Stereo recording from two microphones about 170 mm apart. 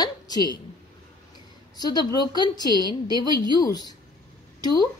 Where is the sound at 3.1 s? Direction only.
25° right (ahead or behind).